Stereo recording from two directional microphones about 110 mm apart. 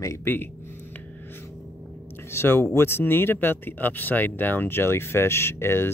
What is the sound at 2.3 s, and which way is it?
Speech, 20° left (ahead or behind).